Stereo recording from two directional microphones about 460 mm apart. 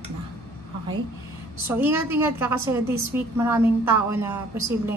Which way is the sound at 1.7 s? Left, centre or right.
Centre.